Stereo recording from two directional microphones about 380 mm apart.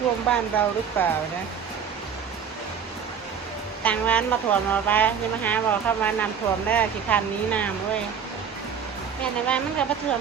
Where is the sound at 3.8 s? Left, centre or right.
Centre.